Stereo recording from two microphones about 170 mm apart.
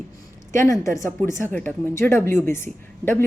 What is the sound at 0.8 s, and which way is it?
Speech, 15° left (ahead or behind).